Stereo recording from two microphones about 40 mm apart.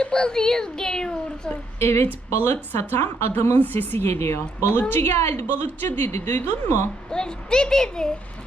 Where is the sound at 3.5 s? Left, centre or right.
Left.